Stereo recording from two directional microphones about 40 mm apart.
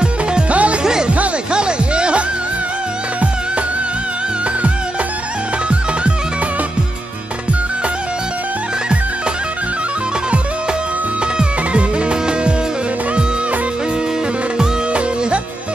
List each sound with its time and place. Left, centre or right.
0.5 s music: right
0.8 s music: centre